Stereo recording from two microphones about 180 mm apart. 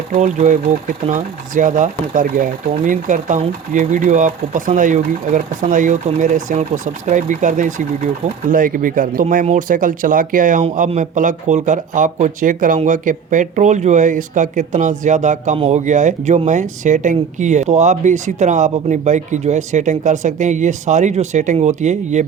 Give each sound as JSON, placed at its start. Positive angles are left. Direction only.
{"t": 0.1, "sound": "speech", "side_deg": -40}